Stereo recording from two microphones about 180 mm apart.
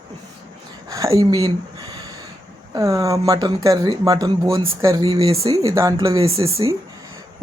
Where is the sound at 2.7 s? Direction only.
20° right (ahead or behind).